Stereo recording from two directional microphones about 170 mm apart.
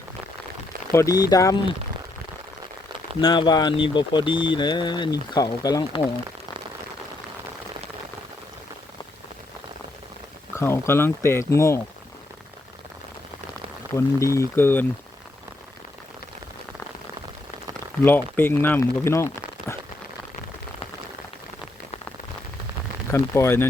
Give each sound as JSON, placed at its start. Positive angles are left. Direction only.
{"t": 0.9, "sound": "speech", "side_deg": 20}
{"t": 3.2, "sound": "speech", "side_deg": 30}
{"t": 10.5, "sound": "speech", "side_deg": 15}
{"t": 13.9, "sound": "speech", "side_deg": 15}
{"t": 18.0, "sound": "speech", "side_deg": 10}
{"t": 23.1, "sound": "speech", "side_deg": 15}